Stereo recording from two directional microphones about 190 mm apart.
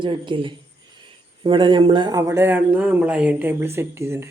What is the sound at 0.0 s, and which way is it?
A man's voice, 25° right (ahead or behind).